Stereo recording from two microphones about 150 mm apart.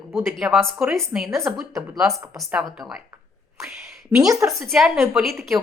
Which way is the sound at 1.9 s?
Centre (ahead or behind).